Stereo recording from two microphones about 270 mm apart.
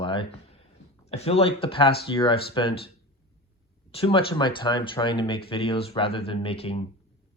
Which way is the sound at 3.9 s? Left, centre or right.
Centre.